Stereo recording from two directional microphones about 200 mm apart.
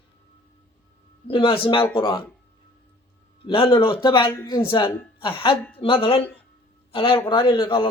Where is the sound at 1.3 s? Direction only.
25° left (ahead or behind).